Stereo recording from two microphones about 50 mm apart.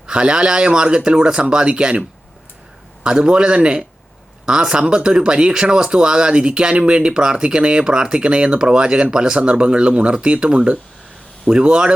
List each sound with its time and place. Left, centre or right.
0.1 s speech: centre